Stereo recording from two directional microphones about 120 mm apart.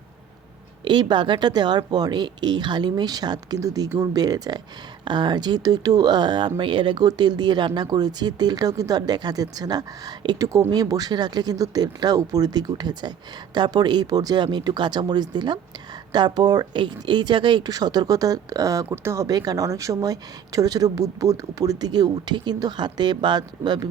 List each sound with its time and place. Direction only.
0.9 s speech: 40° right (ahead or behind)